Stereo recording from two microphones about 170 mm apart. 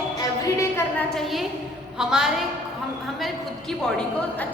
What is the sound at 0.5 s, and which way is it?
Speech, 15° left (ahead or behind).